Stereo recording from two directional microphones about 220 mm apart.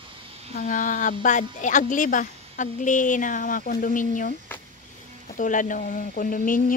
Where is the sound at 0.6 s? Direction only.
35° left (ahead or behind).